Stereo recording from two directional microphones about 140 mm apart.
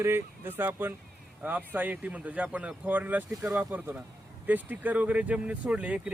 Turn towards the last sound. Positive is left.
turn(degrees=-10)  # may be behind; listen again after turning